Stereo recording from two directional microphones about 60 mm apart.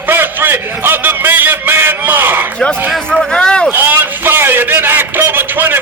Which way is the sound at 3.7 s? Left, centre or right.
Right.